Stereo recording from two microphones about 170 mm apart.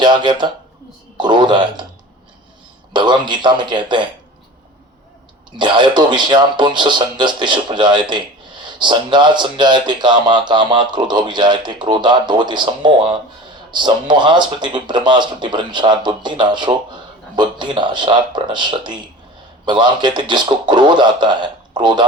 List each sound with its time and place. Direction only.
0.0 s speech: 25° right (ahead or behind)
2.9 s speech: 25° right (ahead or behind)
5.5 s speech: 25° right (ahead or behind)